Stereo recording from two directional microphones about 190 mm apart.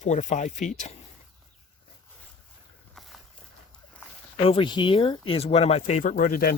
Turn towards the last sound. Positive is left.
turn(degrees=50)  # may be behind; listen again after turning